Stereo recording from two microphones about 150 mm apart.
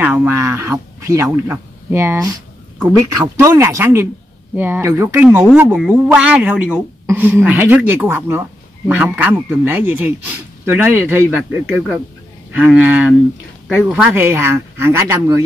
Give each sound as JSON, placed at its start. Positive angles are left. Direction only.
{"t": 0.0, "sound": "speech", "side_deg": -10}
{"t": 3.3, "sound": "speech", "side_deg": -20}